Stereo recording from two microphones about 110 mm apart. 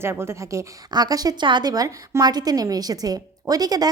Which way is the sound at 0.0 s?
25° right (ahead or behind).